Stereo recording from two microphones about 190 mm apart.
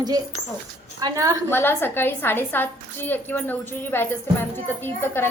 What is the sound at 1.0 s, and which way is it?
Speech, 15° right (ahead or behind).